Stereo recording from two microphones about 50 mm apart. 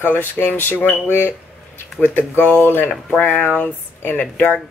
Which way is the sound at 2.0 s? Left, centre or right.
Left.